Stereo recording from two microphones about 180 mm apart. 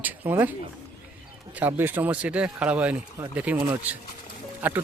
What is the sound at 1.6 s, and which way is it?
Speech, 10° right (ahead or behind).